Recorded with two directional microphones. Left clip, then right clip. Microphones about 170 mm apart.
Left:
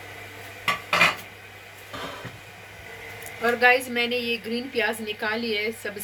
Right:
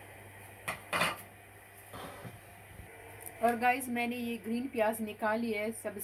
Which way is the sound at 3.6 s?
55° right (ahead or behind).